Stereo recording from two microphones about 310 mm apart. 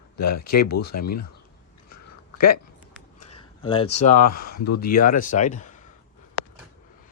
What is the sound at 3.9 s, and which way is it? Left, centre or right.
Speech, left.